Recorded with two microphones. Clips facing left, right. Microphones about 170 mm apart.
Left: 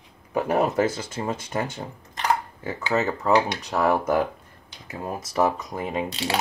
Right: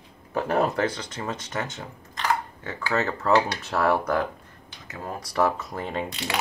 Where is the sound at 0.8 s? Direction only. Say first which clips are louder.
Left 3 dB; 5° left (ahead or behind).